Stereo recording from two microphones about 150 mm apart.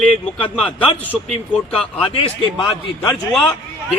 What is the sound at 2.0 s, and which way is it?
Speech, 35° left (ahead or behind).